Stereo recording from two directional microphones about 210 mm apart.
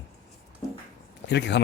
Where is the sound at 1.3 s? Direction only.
55° left (ahead or behind).